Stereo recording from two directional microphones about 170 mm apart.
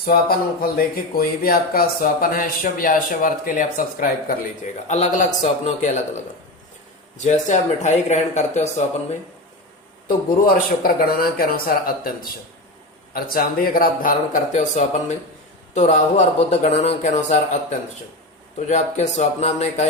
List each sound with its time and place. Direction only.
0.0 s speech: 60° left (ahead or behind); by 6.0 s 45° left (ahead or behind)
7.2 s speech: 45° left (ahead or behind)
10.4 s speech: 60° left (ahead or behind); by 19.9 s 40° left (ahead or behind)